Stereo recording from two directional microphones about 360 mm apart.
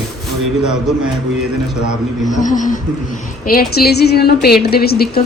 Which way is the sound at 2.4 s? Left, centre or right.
Left.